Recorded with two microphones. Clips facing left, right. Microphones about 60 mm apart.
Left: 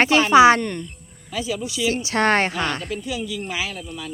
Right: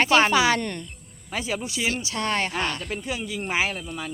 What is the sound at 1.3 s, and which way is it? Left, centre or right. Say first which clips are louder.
Speech: left 2 dB; right.